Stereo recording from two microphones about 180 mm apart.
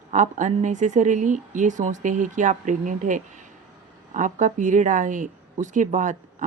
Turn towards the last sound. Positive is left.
turn(degrees=-45)  # may be behind; listen again after turning